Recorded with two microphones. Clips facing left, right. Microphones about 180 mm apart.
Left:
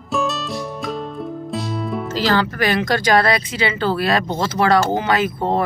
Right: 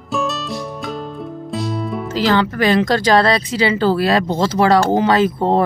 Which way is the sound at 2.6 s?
30° right (ahead or behind).